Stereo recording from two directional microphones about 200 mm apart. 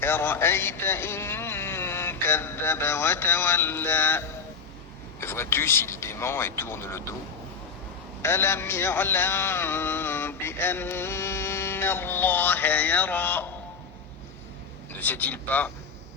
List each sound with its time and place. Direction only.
0.0 s a man's voice: 10° left (ahead or behind)
8.2 s a man's voice: 10° left (ahead or behind)
15.0 s a man's voice: 10° left (ahead or behind)